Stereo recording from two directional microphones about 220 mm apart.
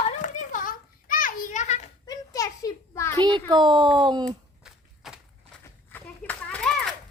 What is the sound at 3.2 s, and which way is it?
Speech, 20° right (ahead or behind).